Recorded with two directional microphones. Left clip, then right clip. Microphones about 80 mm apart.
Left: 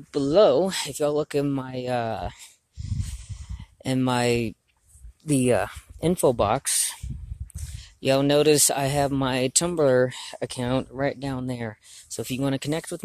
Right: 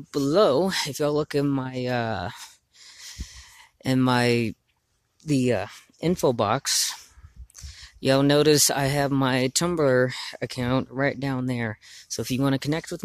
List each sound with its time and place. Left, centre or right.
0.1 s speech: right
0.7 s speech: right
2.9 s snort: right
3.5 s speech: right
5.2 s speech: centre
6.2 s speech: right
10.7 s speech: right
12.5 s speech: right